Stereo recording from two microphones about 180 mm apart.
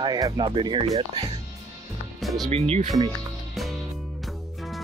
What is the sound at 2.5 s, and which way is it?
Speech, 35° right (ahead or behind).